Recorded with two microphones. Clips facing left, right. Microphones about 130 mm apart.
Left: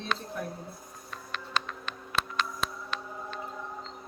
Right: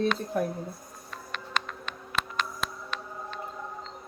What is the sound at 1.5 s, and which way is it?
Music, 35° left (ahead or behind).